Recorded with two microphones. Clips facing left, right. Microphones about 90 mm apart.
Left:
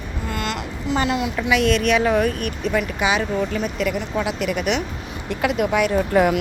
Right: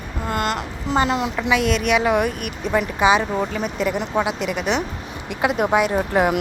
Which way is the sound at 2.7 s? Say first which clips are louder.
Right 5 dB; 25° right (ahead or behind).